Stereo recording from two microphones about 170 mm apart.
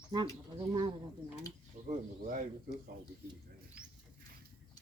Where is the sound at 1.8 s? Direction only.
50° right (ahead or behind).